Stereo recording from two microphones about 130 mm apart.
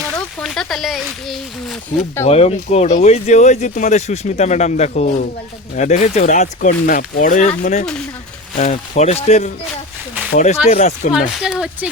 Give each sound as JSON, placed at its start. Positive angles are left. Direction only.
{"t": 0.4, "sound": "speech", "side_deg": 5}
{"t": 2.2, "sound": "speech", "side_deg": 55}
{"t": 7.6, "sound": "speech", "side_deg": 60}
{"t": 10.3, "sound": "speech", "side_deg": 65}
{"t": 11.1, "sound": "speech", "side_deg": 0}